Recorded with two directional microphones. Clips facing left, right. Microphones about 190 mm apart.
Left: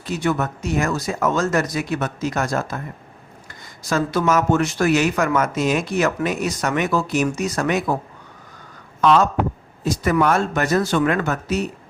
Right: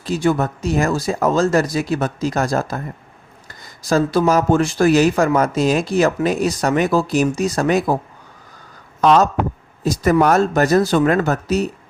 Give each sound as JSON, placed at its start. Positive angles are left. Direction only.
{"t": 0.0, "sound": "speech", "side_deg": -30}
{"t": 3.8, "sound": "speech", "side_deg": -35}
{"t": 9.0, "sound": "speech", "side_deg": -40}